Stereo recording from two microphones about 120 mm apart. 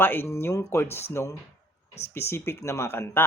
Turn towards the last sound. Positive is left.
turn(degrees=20)  # may be behind; listen again after turning